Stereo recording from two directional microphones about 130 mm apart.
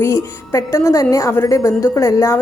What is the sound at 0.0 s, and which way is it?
A woman's voice, 20° left (ahead or behind).